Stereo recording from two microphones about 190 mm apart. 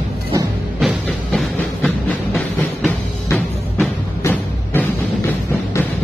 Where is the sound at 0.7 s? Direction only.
Centre (ahead or behind).